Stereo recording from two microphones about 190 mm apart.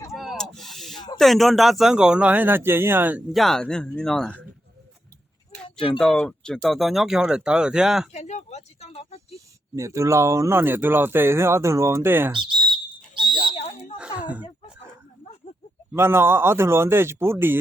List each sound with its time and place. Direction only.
0.1 s a sound: centre (ahead or behind)
0.9 s snake: 20° left (ahead or behind)
1.2 s a man's voice: centre (ahead or behind)
6.0 s a man's voice: 5° left (ahead or behind)
8.1 s speech: 35° left (ahead or behind)
9.7 s speech: 15° right (ahead or behind)
12.3 s speech: 25° right (ahead or behind)
13.4 s a sound: 35° left (ahead or behind)
14.0 s a sound: 5° right (ahead or behind)
15.9 s speech: 10° right (ahead or behind)